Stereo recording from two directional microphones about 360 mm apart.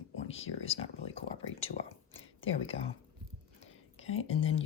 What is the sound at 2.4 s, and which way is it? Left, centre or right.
Speech, centre.